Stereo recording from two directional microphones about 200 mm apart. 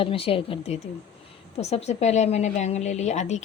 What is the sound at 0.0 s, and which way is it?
A woman's voice, 30° left (ahead or behind).